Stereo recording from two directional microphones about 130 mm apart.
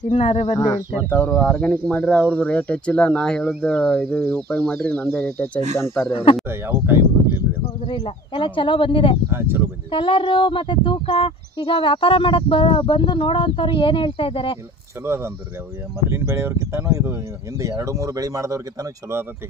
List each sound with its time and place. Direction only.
0.1 s speech: 50° left (ahead or behind)
0.6 s speech: 20° left (ahead or behind)
1.2 s speech: 10° left (ahead or behind)
6.5 s speech: 20° right (ahead or behind)
7.8 s speech: 40° left (ahead or behind)
9.3 s speech: 20° right (ahead or behind)
9.8 s speech: 40° left (ahead or behind)
15.0 s speech: 20° right (ahead or behind)